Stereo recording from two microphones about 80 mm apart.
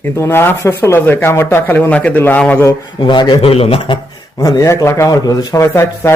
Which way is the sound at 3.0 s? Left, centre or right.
Left.